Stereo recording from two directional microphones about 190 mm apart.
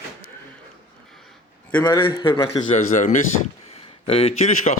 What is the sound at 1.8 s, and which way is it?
Speech, 20° left (ahead or behind).